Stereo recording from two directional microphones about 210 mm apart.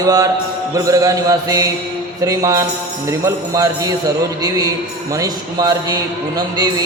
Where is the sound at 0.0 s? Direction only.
15° right (ahead or behind).